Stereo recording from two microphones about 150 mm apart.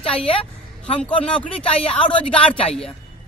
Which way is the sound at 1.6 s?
40° left (ahead or behind).